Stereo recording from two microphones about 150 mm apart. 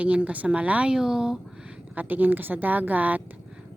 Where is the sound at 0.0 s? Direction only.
10° right (ahead or behind).